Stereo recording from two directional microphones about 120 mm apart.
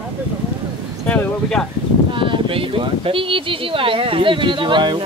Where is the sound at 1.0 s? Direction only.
10° left (ahead or behind).